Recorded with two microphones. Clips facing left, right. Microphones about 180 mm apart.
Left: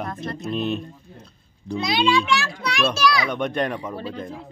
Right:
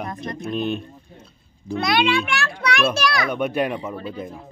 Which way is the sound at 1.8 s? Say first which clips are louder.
Even; 60° right (ahead or behind).